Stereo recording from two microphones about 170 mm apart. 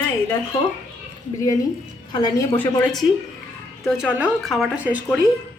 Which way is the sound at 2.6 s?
10° left (ahead or behind).